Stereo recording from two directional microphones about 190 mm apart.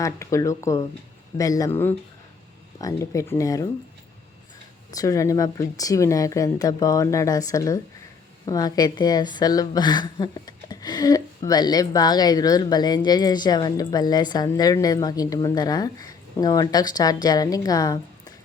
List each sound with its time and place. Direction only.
0.0 s speech: 15° left (ahead or behind)
4.9 s a woman's voice: 20° left (ahead or behind)